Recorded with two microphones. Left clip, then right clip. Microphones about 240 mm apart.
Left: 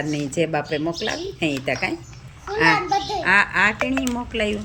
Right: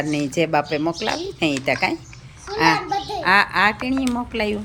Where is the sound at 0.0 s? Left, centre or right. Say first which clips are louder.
Right 2 dB; centre.